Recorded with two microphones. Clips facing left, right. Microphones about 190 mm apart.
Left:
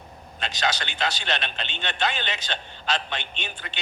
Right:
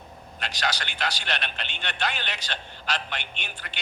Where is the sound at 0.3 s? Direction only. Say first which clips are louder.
Left 3 dB; 20° left (ahead or behind).